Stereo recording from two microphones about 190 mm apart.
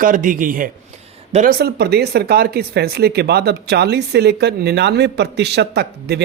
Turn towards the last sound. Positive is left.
turn(degrees=-60)  # may be behind; listen again after turning